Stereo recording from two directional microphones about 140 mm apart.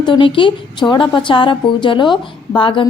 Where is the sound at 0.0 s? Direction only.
35° left (ahead or behind).